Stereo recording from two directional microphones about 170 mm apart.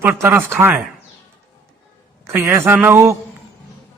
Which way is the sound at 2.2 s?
10° right (ahead or behind).